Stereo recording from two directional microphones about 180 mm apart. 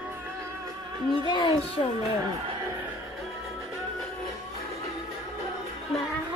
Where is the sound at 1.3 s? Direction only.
25° left (ahead or behind).